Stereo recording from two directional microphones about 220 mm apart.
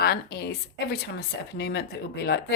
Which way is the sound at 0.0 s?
45° left (ahead or behind).